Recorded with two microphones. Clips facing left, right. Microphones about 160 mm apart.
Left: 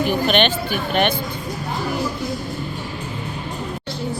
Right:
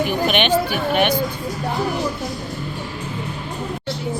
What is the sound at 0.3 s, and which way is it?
Speech, 10° right (ahead or behind).